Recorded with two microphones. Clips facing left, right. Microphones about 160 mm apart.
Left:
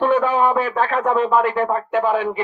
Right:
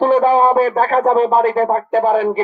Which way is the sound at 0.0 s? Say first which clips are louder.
Right 5 dB; 35° right (ahead or behind).